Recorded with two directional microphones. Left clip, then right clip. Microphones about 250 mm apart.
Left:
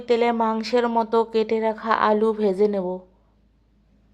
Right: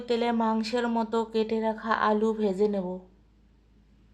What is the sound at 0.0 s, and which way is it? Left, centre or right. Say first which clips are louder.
Speech: left 7 dB; centre.